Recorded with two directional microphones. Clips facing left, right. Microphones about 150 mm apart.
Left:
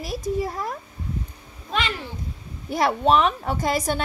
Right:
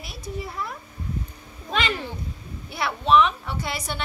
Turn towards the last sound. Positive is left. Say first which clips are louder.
# left 7 dB
turn(degrees=45)  # may be behind; listen again after turning